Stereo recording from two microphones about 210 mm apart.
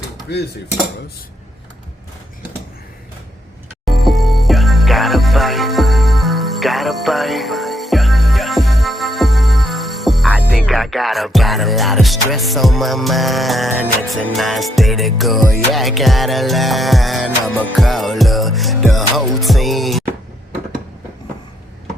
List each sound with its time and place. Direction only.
0.3 s speech: 50° left (ahead or behind)
3.8 s music: centre (ahead or behind)